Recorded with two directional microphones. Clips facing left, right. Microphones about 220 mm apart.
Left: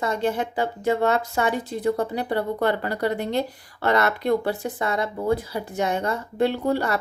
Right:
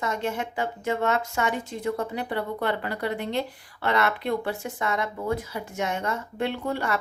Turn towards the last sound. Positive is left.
turn(degrees=35)  # may be behind; listen again after turning